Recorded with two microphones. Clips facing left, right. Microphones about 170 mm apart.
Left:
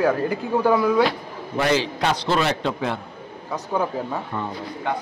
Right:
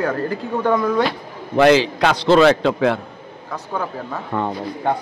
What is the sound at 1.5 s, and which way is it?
A man's voice, 90° right.